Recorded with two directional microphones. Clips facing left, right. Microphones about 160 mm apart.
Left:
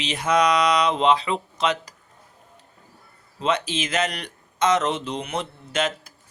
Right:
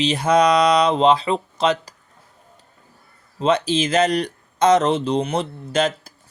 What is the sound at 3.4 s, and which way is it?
Speech, 35° right (ahead or behind).